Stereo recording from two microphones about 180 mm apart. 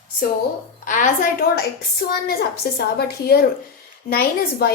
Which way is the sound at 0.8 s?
45° left (ahead or behind).